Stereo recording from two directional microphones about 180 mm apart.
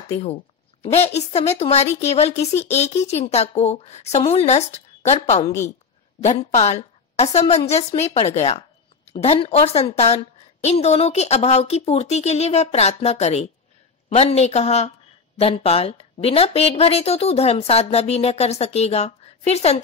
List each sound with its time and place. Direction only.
0.1 s a woman's voice: 35° left (ahead or behind)
5.4 s a woman's voice: 15° left (ahead or behind)
6.5 s a woman's voice: 35° left (ahead or behind)